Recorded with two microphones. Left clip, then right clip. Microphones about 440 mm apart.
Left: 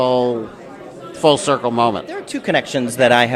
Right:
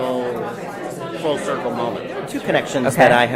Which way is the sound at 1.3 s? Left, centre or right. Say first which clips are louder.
Left 6 dB; left.